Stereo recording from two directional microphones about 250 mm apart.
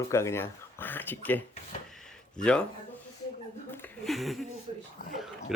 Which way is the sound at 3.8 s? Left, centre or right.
Centre.